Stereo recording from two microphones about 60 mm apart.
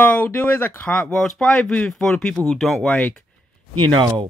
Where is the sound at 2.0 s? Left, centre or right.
Centre.